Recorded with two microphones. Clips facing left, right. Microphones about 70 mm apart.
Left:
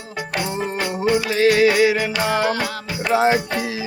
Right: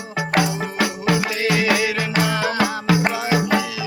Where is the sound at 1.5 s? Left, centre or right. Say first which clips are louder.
Left 2 dB; left.